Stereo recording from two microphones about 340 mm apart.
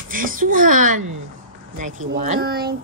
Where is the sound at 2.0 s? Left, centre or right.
Right.